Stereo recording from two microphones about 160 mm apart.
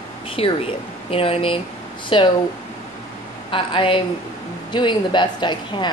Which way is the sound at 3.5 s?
35° left (ahead or behind).